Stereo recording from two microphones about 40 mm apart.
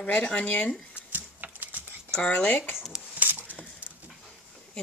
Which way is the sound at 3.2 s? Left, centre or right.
Right.